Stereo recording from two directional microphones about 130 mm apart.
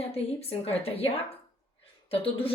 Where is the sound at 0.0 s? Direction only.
50° left (ahead or behind).